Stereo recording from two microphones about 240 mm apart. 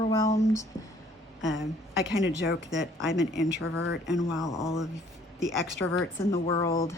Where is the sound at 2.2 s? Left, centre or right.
Left.